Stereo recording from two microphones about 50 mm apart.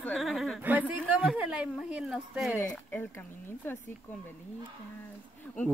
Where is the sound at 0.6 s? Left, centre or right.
Right.